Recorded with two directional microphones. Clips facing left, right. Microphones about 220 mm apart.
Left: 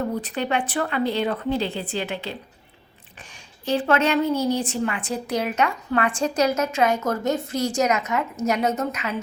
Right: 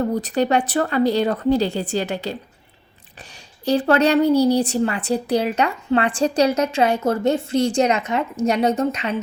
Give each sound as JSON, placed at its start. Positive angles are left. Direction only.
{"t": 0.0, "sound": "a woman's voice", "side_deg": -40}